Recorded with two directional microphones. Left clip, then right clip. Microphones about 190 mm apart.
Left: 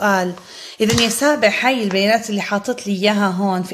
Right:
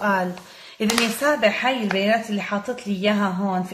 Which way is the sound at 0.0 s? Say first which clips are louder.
Left 5 dB; 40° left (ahead or behind).